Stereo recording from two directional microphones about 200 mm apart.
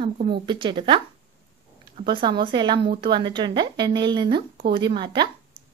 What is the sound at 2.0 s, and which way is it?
A woman's voice, 25° right (ahead or behind).